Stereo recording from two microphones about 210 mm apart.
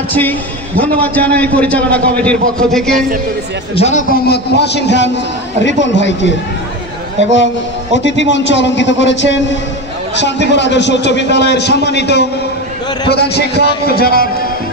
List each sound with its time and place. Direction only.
0.1 s a man's voice: 10° left (ahead or behind)
3.7 s a man's voice: 35° left (ahead or behind)
4.3 s a man's voice: 55° left (ahead or behind)
7.9 s a man's voice: 60° left (ahead or behind)